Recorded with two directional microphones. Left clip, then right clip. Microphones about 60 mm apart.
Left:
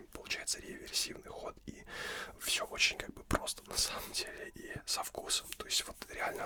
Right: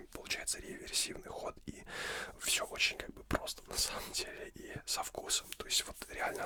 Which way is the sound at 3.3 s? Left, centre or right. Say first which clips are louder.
Left 2 dB; left.